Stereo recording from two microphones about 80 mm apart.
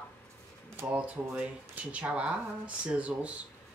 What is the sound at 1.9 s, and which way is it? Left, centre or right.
Speech, centre.